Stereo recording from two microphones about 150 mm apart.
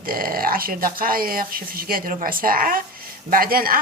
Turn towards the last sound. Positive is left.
turn(degrees=-75)  # may be behind; listen again after turning